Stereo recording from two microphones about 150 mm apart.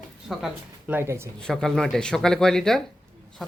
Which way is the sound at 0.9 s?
15° right (ahead or behind).